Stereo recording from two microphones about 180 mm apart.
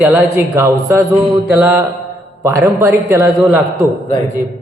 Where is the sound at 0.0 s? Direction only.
10° right (ahead or behind).